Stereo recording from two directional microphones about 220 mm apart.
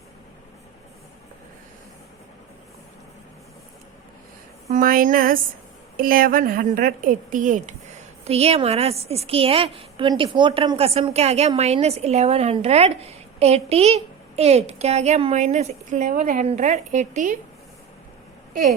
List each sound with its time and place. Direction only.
4.7 s a woman's voice: 40° right (ahead or behind)